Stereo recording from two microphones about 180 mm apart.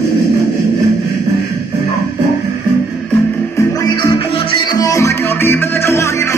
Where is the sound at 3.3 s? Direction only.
15° left (ahead or behind).